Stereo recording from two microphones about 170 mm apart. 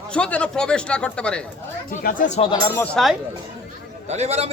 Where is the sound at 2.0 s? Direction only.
55° left (ahead or behind).